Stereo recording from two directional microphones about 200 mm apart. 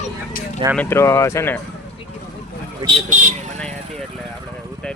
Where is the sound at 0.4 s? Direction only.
45° left (ahead or behind).